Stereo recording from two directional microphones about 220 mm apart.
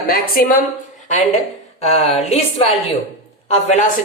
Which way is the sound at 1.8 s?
30° left (ahead or behind).